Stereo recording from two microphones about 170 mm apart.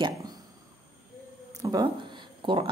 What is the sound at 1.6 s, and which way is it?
Speech, 20° right (ahead or behind).